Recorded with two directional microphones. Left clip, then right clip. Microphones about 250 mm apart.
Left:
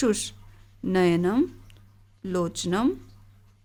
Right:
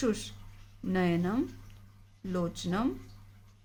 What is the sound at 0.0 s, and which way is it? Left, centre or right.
Speech, left.